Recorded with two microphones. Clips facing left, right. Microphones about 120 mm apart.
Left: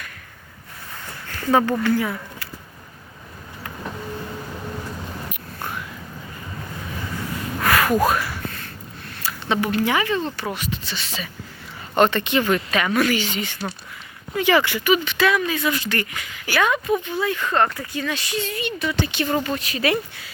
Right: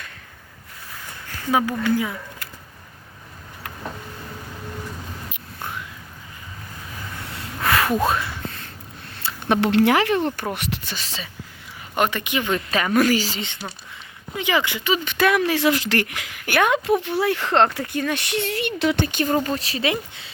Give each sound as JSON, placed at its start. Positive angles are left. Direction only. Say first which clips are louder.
{"t": 1.5, "sound": "speech", "louder": "left 2 dB", "side_deg": -10}
{"t": 7.6, "sound": "a sound", "louder": "left 2 dB", "side_deg": -25}
{"t": 9.5, "sound": "speech", "louder": "right 4 dB", "side_deg": -75}
{"t": 10.9, "sound": "speech", "louder": "left 2 dB", "side_deg": -35}
{"t": 11.9, "sound": "speech", "louder": "left 4 dB", "side_deg": -10}
{"t": 12.5, "sound": "speech", "louder": "left 1 dB", "side_deg": -30}
{"t": 14.3, "sound": "speech", "louder": "left 4 dB", "side_deg": -20}
{"t": 15.0, "sound": "speech", "louder": "right 1 dB", "side_deg": -55}
{"t": 17.0, "sound": "speech", "louder": "right 2 dB", "side_deg": -65}
{"t": 18.0, "sound": "speech", "louder": "right 1 dB", "side_deg": -60}
{"t": 19.0, "sound": "speech", "louder": "right 1 dB", "side_deg": -45}